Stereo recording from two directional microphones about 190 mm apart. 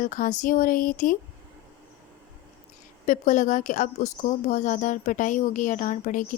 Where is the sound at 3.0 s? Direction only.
40° left (ahead or behind).